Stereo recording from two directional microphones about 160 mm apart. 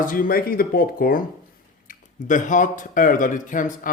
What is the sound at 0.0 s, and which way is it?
Speech, 60° left (ahead or behind).